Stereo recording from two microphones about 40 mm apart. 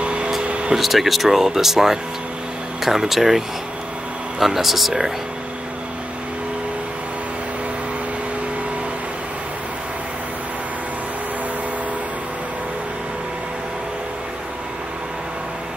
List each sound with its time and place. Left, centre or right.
0.0 s air conditioning: right
0.7 s speech: centre